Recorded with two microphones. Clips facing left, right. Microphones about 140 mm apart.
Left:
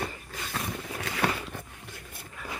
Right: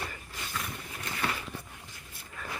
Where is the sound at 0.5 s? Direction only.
70° left (ahead or behind).